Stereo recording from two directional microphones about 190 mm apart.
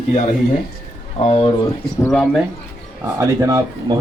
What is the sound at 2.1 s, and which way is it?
Speech, centre (ahead or behind).